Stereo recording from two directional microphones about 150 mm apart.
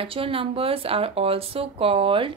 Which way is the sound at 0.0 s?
40° right (ahead or behind).